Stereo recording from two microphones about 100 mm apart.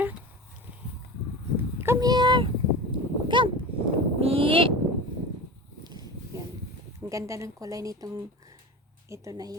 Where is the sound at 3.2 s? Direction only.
55° right (ahead or behind).